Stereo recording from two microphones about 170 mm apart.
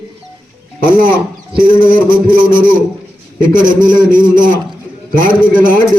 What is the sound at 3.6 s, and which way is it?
A man's voice, 50° right (ahead or behind).